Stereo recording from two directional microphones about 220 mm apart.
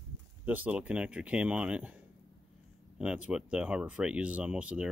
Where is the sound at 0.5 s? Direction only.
5° right (ahead or behind).